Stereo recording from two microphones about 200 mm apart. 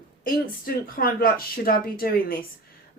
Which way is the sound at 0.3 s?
45° left (ahead or behind).